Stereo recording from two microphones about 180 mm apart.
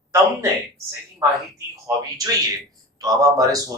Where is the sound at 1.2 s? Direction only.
20° right (ahead or behind).